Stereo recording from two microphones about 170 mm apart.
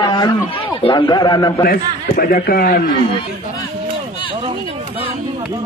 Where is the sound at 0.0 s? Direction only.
25° left (ahead or behind).